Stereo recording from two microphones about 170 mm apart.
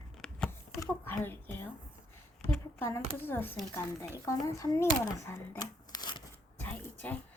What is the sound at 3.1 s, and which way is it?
Speech, 10° left (ahead or behind).